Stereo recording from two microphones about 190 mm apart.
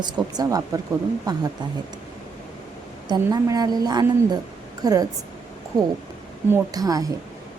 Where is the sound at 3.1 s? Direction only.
20° right (ahead or behind).